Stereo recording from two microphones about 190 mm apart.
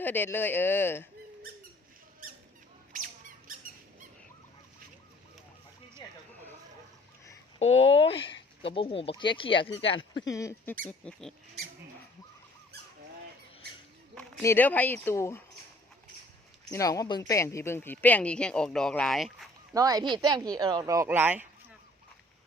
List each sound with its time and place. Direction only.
0.0 s speech: 10° left (ahead or behind)
2.9 s a sound: 45° right (ahead or behind)
6.0 s a sound: 20° left (ahead or behind)
7.6 s speech: 90° left
8.1 s speech: 30° left (ahead or behind)
10.2 s speech: 15° left (ahead or behind)
11.0 s squeak: centre (ahead or behind)
14.2 s speech: 10° left (ahead or behind)
16.7 s speech: 15° left (ahead or behind); by 19.5 s centre (ahead or behind)
19.7 s speech: 20° right (ahead or behind)